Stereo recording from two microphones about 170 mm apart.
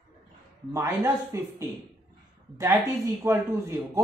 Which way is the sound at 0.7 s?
20° right (ahead or behind).